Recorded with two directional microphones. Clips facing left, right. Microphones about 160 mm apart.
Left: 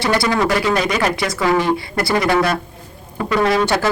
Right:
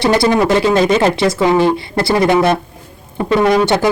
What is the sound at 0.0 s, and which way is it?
Speech, 20° right (ahead or behind).